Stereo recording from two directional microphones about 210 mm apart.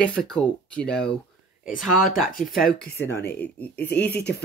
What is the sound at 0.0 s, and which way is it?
Speech, 5° left (ahead or behind).